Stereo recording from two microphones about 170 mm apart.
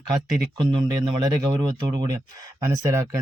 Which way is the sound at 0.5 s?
30° right (ahead or behind).